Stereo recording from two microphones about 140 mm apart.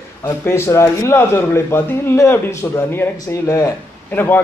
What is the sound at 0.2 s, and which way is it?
A man's voice, 20° left (ahead or behind).